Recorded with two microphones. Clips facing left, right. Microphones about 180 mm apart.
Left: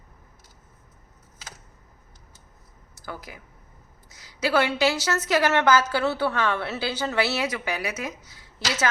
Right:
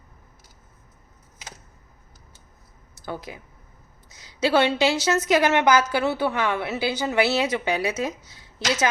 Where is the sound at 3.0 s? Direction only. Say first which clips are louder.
Right 5 dB; 25° right (ahead or behind).